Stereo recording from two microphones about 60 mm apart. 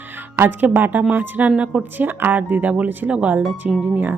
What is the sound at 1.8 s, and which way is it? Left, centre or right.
Speech, right.